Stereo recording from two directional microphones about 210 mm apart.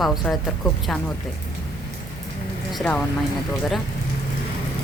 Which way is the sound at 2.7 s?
5° left (ahead or behind).